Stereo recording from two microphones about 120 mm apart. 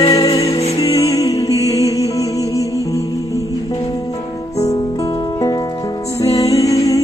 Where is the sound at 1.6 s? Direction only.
60° left (ahead or behind).